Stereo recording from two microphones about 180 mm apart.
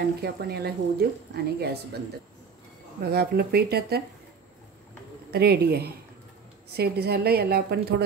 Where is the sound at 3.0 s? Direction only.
60° right (ahead or behind).